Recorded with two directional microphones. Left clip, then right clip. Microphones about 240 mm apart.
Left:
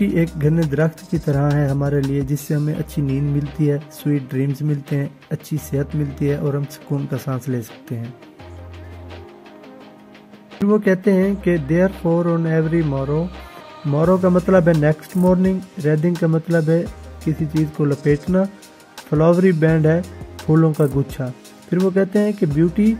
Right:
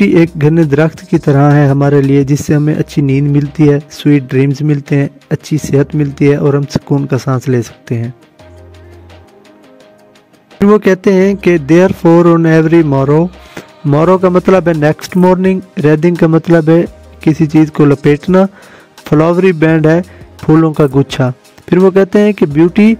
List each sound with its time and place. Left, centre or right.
0.0 s speech: right
10.7 s speech: right